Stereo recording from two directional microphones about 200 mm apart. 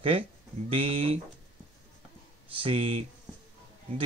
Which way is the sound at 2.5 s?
25° right (ahead or behind).